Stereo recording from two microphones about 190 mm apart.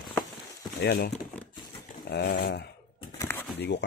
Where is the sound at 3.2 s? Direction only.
10° left (ahead or behind).